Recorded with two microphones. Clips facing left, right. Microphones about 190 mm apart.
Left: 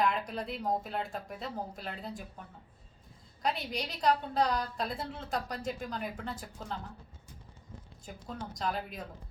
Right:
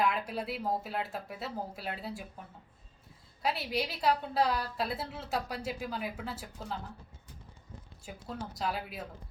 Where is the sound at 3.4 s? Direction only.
5° right (ahead or behind).